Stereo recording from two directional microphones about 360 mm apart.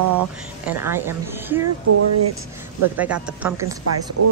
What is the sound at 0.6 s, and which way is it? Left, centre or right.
A woman's voice, centre.